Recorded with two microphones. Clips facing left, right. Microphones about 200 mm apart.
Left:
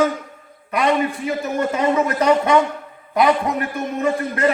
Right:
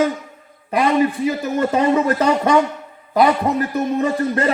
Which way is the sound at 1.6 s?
30° right (ahead or behind).